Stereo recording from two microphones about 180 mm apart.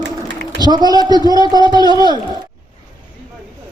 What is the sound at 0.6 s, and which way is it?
A man's voice, 25° right (ahead or behind).